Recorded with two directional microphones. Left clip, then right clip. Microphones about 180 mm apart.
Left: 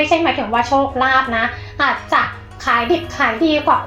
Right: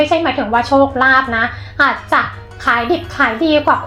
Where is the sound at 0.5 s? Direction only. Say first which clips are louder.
Right 6 dB; 20° right (ahead or behind).